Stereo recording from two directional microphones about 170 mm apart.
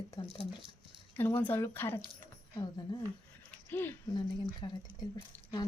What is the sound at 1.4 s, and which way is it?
Speech, 10° left (ahead or behind).